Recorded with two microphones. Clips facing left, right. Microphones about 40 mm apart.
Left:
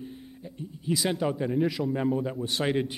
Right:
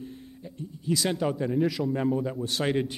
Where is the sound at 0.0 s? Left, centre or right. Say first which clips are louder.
Even; centre.